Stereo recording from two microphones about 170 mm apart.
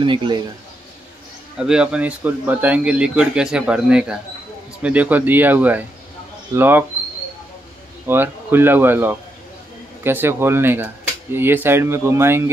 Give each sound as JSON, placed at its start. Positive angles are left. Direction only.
{"t": 0.0, "sound": "speech", "side_deg": -30}
{"t": 1.6, "sound": "speech", "side_deg": -5}
{"t": 8.1, "sound": "speech", "side_deg": -15}